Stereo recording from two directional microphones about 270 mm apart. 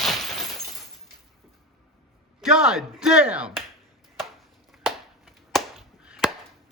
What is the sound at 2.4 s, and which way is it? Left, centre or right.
Speech, centre.